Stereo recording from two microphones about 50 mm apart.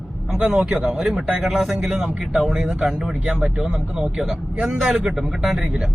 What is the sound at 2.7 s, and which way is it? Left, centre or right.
Speech, centre.